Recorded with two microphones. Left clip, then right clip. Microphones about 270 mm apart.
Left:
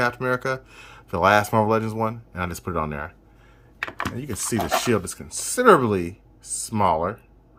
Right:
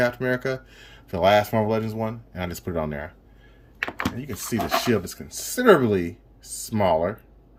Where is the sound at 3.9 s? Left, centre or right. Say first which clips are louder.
Even; left.